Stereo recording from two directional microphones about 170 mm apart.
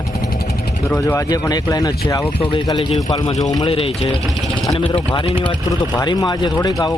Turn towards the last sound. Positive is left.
turn(degrees=20)  # may be behind; listen again after turning